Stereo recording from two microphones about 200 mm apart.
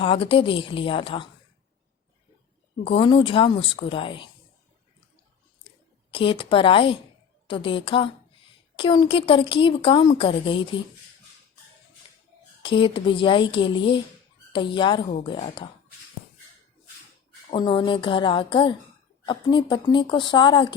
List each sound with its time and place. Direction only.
0.0 s a woman's voice: 25° left (ahead or behind)
2.8 s a woman's voice: 25° left (ahead or behind)
6.1 s a woman's voice: 25° left (ahead or behind)
12.6 s a woman's voice: 25° left (ahead or behind)
17.5 s a woman's voice: 25° left (ahead or behind)